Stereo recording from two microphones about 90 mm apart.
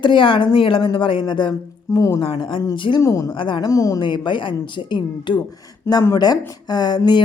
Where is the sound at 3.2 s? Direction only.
65° left (ahead or behind).